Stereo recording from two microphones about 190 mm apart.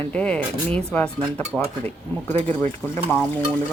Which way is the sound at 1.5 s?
Centre (ahead or behind).